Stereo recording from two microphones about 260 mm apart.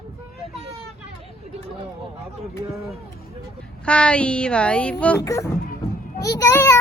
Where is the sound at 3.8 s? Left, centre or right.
Centre.